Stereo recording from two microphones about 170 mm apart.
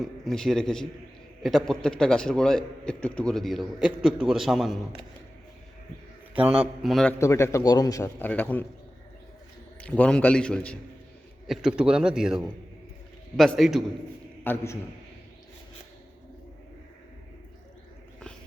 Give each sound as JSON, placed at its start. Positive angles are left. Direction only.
{"t": 0.0, "sound": "a man's voice", "side_deg": 0}
{"t": 6.3, "sound": "a man's voice", "side_deg": -10}
{"t": 6.9, "sound": "a man's voice", "side_deg": 5}
{"t": 7.2, "sound": "a man's voice", "side_deg": 15}
{"t": 9.8, "sound": "a man's voice", "side_deg": 5}
{"t": 14.4, "sound": "a man's voice", "side_deg": 15}